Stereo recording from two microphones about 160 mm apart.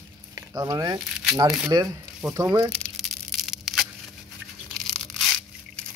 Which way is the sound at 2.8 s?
5° left (ahead or behind).